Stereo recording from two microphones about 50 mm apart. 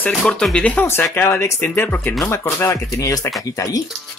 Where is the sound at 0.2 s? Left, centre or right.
Centre.